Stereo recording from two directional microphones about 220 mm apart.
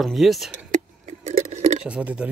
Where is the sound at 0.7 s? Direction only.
30° right (ahead or behind).